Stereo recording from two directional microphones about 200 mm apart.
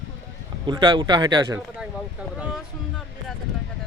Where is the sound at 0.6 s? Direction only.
25° right (ahead or behind).